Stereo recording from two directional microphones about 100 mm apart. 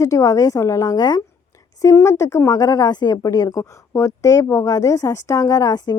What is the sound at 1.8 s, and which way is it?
Speech, 30° left (ahead or behind).